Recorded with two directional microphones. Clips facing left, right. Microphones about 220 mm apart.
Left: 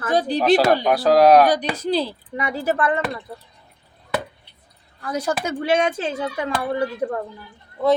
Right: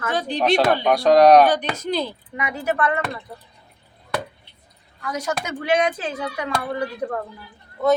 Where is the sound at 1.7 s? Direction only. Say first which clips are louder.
Left 3 dB; 35° left (ahead or behind).